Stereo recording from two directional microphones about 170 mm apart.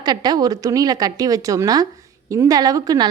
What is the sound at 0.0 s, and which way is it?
Speech, 25° right (ahead or behind).